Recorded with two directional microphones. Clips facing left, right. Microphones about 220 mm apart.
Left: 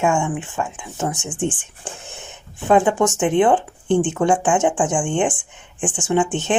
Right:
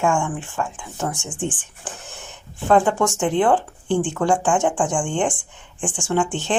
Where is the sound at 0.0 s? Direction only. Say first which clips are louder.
Left 2 dB; 20° left (ahead or behind).